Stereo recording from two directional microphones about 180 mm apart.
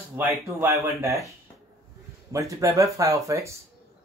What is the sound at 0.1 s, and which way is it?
Speech, 15° right (ahead or behind).